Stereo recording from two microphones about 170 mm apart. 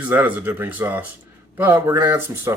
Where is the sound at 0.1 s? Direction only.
10° right (ahead or behind).